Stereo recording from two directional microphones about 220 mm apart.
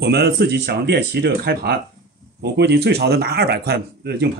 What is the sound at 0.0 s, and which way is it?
Speech, 45° right (ahead or behind).